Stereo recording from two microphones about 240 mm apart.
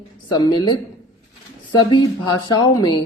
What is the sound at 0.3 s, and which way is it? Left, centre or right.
Speech, centre.